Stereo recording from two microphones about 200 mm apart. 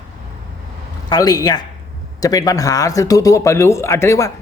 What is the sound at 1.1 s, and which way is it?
A man's voice, 20° left (ahead or behind).